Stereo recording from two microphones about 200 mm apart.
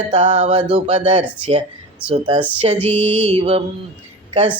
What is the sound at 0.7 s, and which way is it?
Speech, 30° right (ahead or behind).